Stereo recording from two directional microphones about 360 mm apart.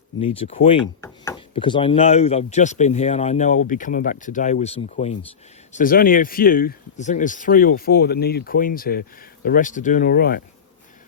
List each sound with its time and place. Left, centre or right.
0.3 s speech: centre